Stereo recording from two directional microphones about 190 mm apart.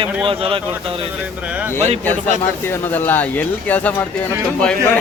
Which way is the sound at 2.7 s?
10° left (ahead or behind).